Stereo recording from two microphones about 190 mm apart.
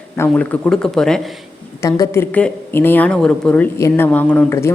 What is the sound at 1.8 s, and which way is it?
A woman's voice, 15° left (ahead or behind).